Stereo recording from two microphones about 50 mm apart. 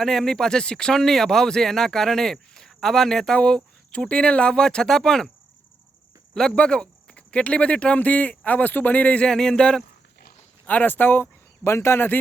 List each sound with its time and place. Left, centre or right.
0.0 s speech: centre
3.3 s speech: left
6.6 s speech: centre
9.2 s speech: centre
10.7 s speech: left
11.7 s speech: left